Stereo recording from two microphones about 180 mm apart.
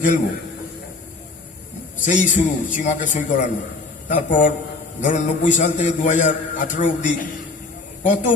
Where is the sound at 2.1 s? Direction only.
45° left (ahead or behind).